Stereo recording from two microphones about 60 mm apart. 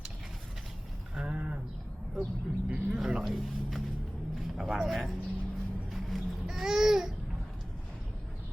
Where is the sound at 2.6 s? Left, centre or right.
Centre.